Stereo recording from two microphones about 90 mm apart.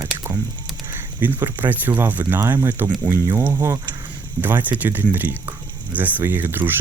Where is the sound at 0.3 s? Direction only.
35° right (ahead or behind).